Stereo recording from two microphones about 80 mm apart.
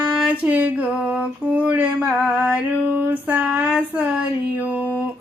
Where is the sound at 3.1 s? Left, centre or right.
Right.